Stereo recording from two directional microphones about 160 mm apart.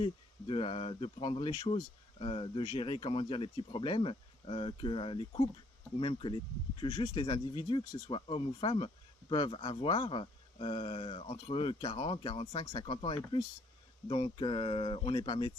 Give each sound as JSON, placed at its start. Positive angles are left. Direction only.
{"t": 0.0, "sound": "speech", "side_deg": 30}